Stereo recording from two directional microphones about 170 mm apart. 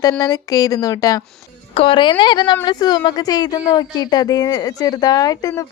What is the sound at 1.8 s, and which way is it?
Speech, 30° left (ahead or behind).